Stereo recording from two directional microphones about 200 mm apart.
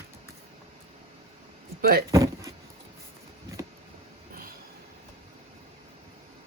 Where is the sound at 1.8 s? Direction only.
50° right (ahead or behind).